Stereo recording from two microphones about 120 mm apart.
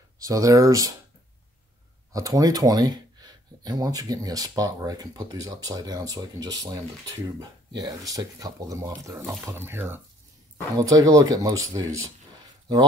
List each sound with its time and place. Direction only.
0.2 s speech: 30° right (ahead or behind)
2.1 s speech: 30° right (ahead or behind)
9.5 s speech: 20° right (ahead or behind)
10.8 s speech: 30° right (ahead or behind)